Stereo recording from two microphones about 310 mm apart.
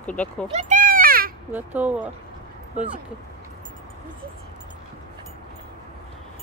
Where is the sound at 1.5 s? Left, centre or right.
Centre.